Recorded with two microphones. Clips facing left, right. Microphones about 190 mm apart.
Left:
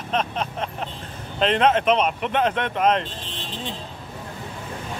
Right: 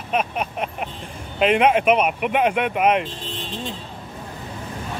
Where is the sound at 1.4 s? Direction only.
10° right (ahead or behind).